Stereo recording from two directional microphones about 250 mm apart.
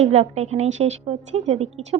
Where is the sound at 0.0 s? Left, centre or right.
Right.